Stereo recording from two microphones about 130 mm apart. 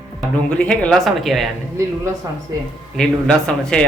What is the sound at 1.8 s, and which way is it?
Speech, 25° right (ahead or behind).